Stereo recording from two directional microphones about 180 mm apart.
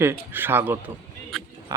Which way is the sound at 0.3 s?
10° right (ahead or behind).